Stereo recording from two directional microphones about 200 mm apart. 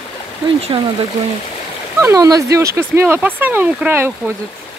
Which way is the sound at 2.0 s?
15° right (ahead or behind).